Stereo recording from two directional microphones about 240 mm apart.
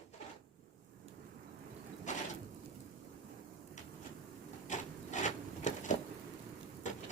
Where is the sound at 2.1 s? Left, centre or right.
Left.